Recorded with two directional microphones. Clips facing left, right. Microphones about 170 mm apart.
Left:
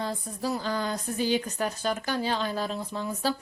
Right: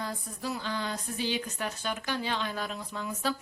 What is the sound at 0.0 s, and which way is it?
A woman's voice, 30° left (ahead or behind).